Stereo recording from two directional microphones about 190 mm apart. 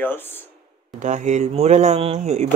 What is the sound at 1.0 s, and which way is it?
Speech, 40° right (ahead or behind).